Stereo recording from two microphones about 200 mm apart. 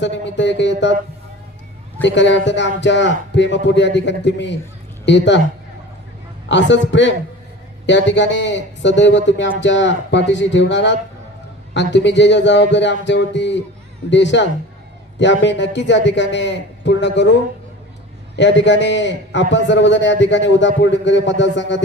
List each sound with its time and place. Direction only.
0.0 s a man's voice: 65° left (ahead or behind)
2.0 s a man's voice: 65° left (ahead or behind)
6.5 s a man's voice: 65° left (ahead or behind)
18.3 s a man's voice: 60° left (ahead or behind)